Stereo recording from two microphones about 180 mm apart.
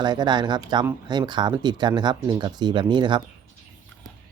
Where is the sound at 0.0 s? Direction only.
25° right (ahead or behind).